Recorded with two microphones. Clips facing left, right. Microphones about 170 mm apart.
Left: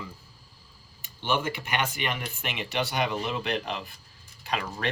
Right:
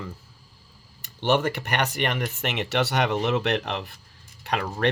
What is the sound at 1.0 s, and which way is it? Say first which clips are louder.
Speech: right 6 dB; 75° right (ahead or behind).